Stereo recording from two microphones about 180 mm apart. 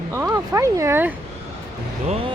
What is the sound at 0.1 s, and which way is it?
Speech, 15° right (ahead or behind).